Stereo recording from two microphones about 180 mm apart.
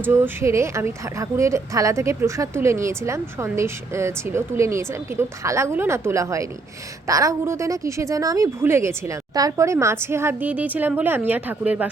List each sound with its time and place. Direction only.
0.0 s a woman's voice: 15° right (ahead or behind)